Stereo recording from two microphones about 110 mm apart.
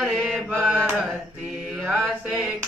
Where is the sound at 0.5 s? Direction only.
15° right (ahead or behind).